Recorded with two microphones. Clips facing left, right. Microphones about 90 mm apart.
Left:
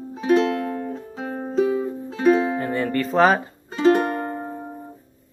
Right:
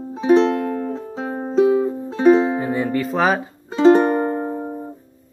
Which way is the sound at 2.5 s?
10° right (ahead or behind).